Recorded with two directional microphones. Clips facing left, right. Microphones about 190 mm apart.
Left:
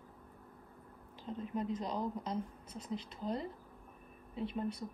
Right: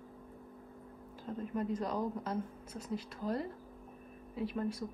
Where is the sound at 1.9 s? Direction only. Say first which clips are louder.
Right 2 dB; 10° right (ahead or behind).